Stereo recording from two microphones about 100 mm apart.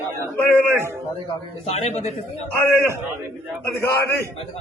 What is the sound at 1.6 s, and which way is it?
Speech, 90° left.